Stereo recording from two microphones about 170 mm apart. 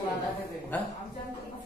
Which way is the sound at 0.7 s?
10° left (ahead or behind).